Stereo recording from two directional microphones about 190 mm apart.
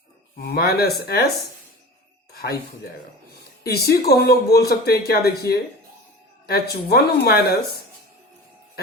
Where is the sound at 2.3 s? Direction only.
55° left (ahead or behind).